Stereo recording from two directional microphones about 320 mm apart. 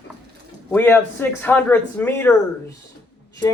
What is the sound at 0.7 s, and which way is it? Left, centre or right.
Speech, centre.